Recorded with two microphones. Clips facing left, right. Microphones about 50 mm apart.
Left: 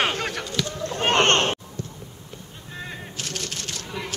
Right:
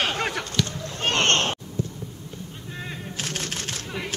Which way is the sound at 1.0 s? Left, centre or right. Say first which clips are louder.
Left 3 dB; left.